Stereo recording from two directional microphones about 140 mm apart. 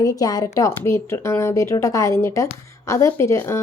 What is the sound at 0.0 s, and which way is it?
A woman's voice, 25° left (ahead or behind).